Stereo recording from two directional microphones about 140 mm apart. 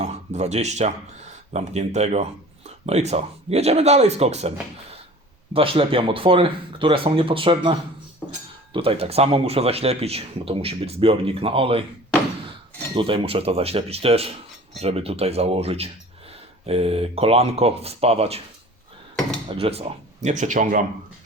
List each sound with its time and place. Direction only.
0.0 s a man's voice: 55° right (ahead or behind)
5.5 s speech: 40° right (ahead or behind)
8.2 s speech: 5° left (ahead or behind)
8.7 s a man's voice: 40° right (ahead or behind)
12.9 s a man's voice: 40° right (ahead or behind)
19.5 s speech: 45° right (ahead or behind); by 20.8 s 65° right (ahead or behind)